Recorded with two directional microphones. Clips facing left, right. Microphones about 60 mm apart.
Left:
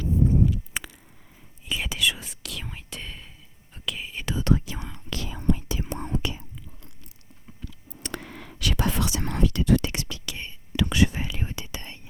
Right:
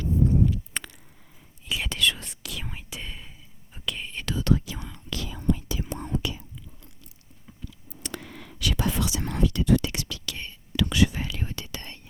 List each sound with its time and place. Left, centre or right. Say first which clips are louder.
0.7 s a sound: left 1 dB; centre
1.7 s whispering: even; centre
4.3 s whispering: even; left
7.6 s whispering: left 1 dB; left
9.9 s whispering: left 1 dB; left
10.2 s whispering: even; centre